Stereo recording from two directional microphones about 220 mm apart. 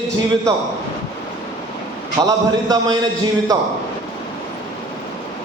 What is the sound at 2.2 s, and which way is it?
Speech, 15° right (ahead or behind).